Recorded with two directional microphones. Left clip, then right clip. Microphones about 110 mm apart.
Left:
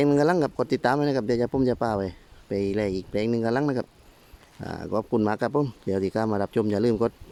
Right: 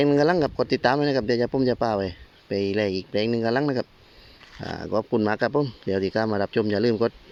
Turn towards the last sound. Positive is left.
turn(degrees=20)  # may be behind; listen again after turning